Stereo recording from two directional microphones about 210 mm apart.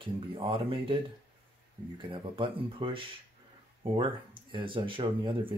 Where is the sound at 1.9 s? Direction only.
25° right (ahead or behind).